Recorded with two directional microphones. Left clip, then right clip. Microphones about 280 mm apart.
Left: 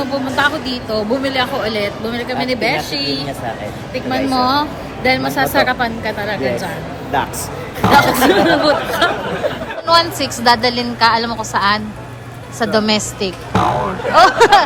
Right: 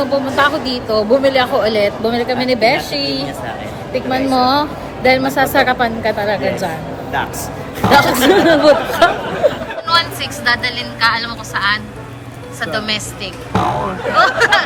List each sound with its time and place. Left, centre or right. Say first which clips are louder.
0.0 s a woman's voice: right 2 dB; centre
4.4 s a woman's voice: right 2 dB; centre
7.8 s speech: even; centre
9.8 s a woman's voice: left 2 dB; centre
13.5 s speech: even; centre
14.2 s a woman's voice: left 3 dB; left